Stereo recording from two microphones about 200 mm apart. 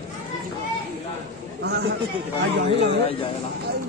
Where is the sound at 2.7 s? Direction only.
25° left (ahead or behind).